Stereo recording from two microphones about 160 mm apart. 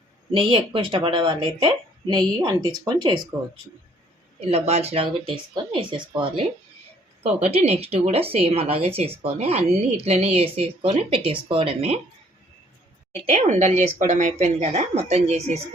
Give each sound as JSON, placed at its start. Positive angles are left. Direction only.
{"t": 0.3, "sound": "speech", "side_deg": -30}
{"t": 4.4, "sound": "speech", "side_deg": -40}
{"t": 13.2, "sound": "a woman's voice", "side_deg": -50}